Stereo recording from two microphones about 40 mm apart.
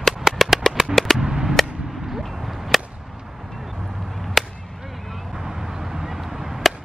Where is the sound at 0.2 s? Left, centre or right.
Centre.